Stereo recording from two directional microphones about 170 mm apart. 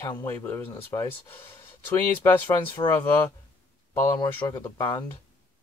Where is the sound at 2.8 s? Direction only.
10° left (ahead or behind).